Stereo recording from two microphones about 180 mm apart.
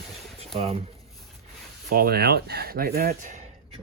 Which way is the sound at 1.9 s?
60° right (ahead or behind).